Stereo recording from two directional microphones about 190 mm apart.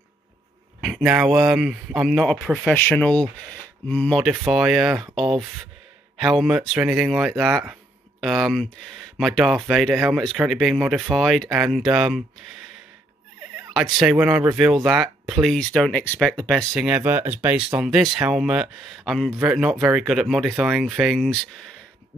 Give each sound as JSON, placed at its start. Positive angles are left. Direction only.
{"t": 0.7, "sound": "speech", "side_deg": -5}
{"t": 6.1, "sound": "speech", "side_deg": 0}
{"t": 14.0, "sound": "speech", "side_deg": -5}